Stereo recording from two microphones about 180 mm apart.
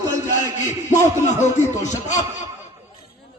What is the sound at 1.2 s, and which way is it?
Speech, 40° left (ahead or behind).